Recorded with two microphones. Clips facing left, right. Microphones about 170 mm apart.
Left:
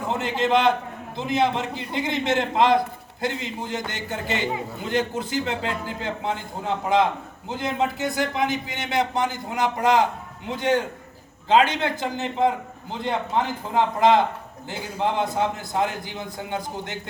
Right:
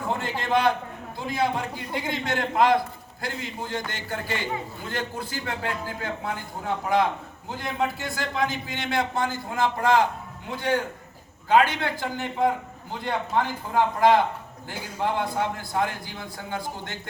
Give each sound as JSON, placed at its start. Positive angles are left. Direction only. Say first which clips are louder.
{"t": 0.1, "sound": "a man's voice", "louder": "left 4 dB", "side_deg": 20}